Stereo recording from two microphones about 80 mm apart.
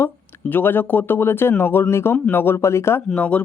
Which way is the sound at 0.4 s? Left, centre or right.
Left.